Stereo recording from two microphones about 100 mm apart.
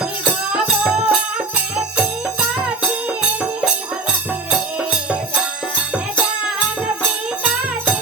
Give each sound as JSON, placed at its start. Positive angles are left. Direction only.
{"t": 0.0, "sound": "music", "side_deg": -5}